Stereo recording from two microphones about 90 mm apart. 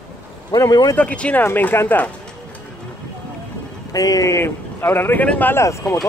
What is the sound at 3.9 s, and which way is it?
Speech, 40° left (ahead or behind).